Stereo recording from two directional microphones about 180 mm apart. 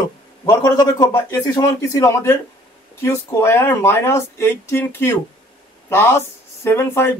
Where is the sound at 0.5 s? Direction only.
15° left (ahead or behind).